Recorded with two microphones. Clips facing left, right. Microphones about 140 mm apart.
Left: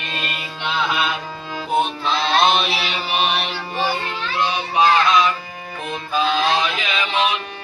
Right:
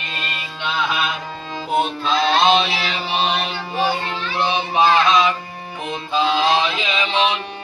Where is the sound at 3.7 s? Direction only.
15° right (ahead or behind).